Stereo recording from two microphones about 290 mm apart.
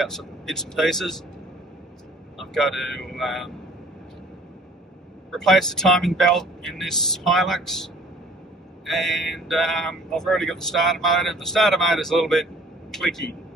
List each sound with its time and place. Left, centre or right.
0.0 s speech: centre
2.5 s speech: centre
5.3 s speech: centre